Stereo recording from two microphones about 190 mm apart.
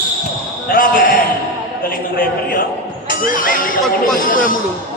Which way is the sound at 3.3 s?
45° left (ahead or behind).